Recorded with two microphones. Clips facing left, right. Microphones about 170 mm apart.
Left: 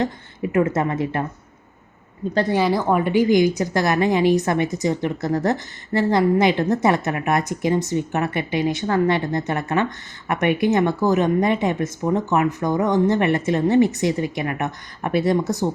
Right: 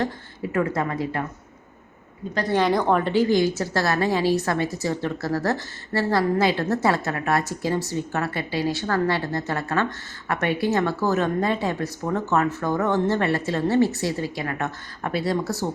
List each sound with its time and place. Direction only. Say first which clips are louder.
0.0 s a woman's voice: left 3 dB; 20° left (ahead or behind)
2.5 s a woman's voice: right 1 dB; 5° left (ahead or behind)